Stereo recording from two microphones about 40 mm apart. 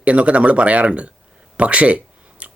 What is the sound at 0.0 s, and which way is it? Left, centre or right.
Speech, right.